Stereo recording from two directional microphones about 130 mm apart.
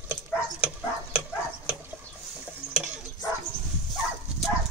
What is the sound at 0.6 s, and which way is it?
Dog, 10° right (ahead or behind).